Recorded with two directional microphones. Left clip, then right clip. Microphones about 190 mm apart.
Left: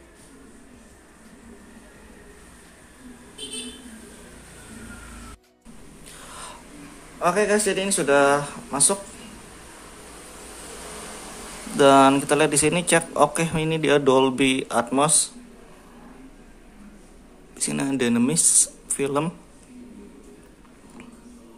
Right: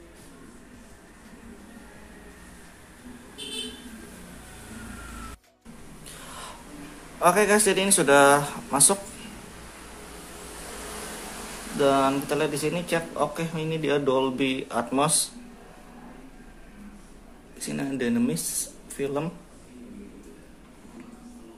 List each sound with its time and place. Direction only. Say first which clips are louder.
7.2 s speech: right 1 dB; centre (ahead or behind)
11.8 s speech: left 7 dB; 25° left (ahead or behind)
17.6 s speech: left 5 dB; 25° left (ahead or behind)